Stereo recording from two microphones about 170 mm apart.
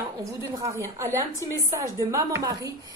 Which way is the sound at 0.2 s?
15° right (ahead or behind).